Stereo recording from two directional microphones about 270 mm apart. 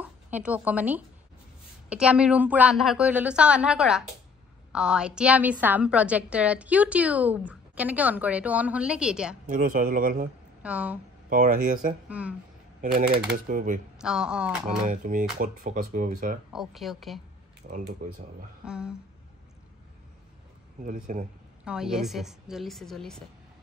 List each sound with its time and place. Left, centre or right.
0.0 s a woman's voice: centre
9.5 s speech: right
10.6 s speech: centre
11.2 s speech: right
12.1 s a woman's voice: centre
12.8 s speech: right
13.9 s a woman's voice: centre
14.9 s speech: right
16.5 s a woman's voice: centre
17.6 s speech: right
18.7 s a woman's voice: centre
20.8 s speech: right
21.6 s a woman's voice: centre